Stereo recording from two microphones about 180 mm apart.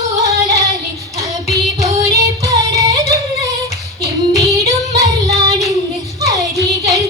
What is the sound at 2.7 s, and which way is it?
Music, 20° right (ahead or behind).